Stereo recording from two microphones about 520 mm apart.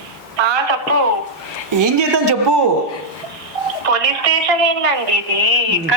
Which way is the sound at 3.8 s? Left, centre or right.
Right.